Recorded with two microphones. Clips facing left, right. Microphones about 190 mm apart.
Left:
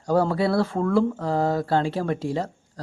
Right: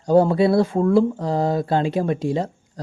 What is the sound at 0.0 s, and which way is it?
Speech, 20° right (ahead or behind).